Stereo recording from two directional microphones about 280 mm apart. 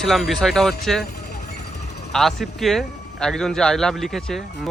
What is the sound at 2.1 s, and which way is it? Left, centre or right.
A man's voice, centre.